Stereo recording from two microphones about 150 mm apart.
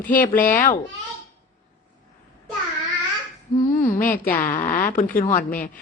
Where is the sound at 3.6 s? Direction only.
60° left (ahead or behind).